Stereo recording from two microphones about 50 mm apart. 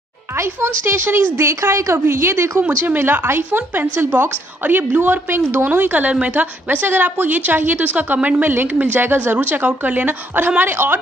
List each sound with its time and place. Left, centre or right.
0.4 s speech: right
1.5 s a woman's voice: right
3.0 s a woman's voice: right
5.7 s a woman's voice: right
6.9 s a woman's voice: right